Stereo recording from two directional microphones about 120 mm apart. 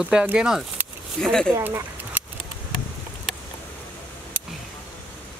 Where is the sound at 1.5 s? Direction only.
20° right (ahead or behind).